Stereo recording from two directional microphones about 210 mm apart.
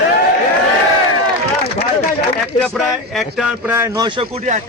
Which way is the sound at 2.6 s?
Centre (ahead or behind).